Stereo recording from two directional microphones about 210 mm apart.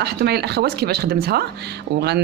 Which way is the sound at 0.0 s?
50° right (ahead or behind).